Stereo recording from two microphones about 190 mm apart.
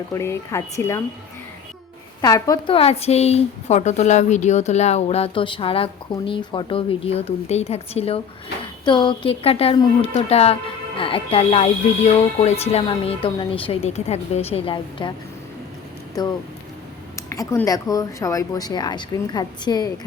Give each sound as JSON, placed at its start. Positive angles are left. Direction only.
{"t": 0.1, "sound": "speech", "side_deg": 15}
{"t": 2.2, "sound": "speech", "side_deg": 20}
{"t": 16.2, "sound": "speech", "side_deg": 20}